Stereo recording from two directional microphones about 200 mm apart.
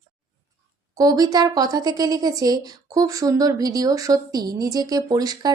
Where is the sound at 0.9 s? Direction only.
20° right (ahead or behind).